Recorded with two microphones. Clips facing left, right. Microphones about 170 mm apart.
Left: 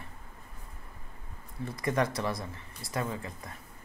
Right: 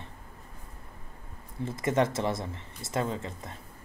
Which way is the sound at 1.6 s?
25° right (ahead or behind).